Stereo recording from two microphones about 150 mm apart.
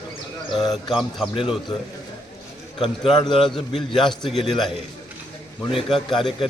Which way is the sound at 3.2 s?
30° left (ahead or behind).